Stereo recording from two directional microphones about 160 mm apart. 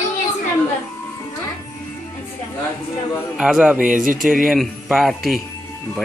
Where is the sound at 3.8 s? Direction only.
55° right (ahead or behind).